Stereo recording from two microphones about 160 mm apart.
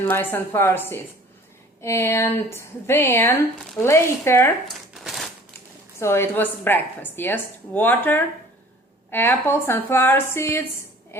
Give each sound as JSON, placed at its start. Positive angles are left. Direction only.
{"t": 0.1, "sound": "a woman's voice", "side_deg": 15}
{"t": 4.7, "sound": "crumpling", "side_deg": 0}
{"t": 6.0, "sound": "a woman's voice", "side_deg": 15}
{"t": 11.1, "sound": "a sound", "side_deg": 15}